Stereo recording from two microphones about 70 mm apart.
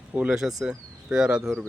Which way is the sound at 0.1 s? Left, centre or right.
Centre.